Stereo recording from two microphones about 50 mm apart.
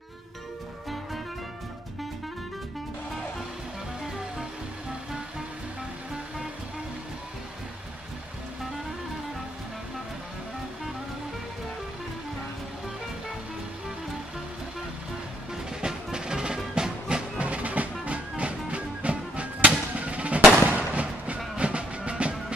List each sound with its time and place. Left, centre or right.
15.8 s music: centre
17.5 s music: right